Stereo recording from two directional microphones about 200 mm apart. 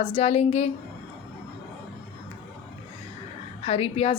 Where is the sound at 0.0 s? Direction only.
30° left (ahead or behind).